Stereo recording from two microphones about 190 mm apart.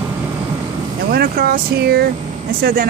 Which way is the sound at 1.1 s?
55° right (ahead or behind).